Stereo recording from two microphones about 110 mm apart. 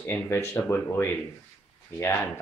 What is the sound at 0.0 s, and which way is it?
Speech, 20° left (ahead or behind).